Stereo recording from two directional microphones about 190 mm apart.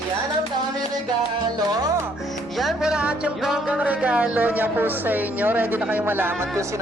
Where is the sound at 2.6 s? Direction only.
Centre (ahead or behind).